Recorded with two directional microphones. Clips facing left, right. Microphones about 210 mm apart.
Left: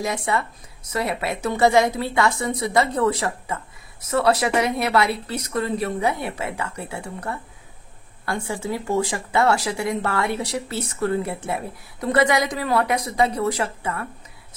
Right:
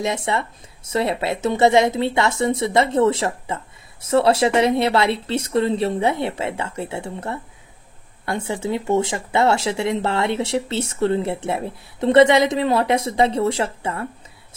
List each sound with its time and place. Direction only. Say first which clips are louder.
0.0 s a woman's voice: right 2 dB; 25° right (ahead or behind)